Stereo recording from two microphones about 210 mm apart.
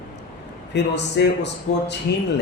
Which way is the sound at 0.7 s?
55° left (ahead or behind).